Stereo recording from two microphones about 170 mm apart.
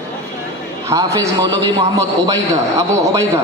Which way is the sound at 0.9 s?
20° right (ahead or behind).